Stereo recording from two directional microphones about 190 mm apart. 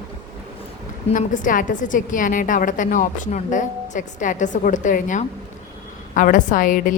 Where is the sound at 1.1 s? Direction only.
45° left (ahead or behind).